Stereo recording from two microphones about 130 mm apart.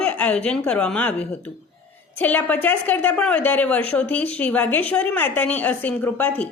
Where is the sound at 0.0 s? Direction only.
10° left (ahead or behind).